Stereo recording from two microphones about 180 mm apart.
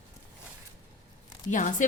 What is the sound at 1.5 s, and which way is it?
Speech, 45° left (ahead or behind).